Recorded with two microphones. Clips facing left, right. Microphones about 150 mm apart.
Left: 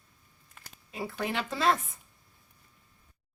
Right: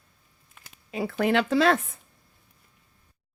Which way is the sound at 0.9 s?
80° right.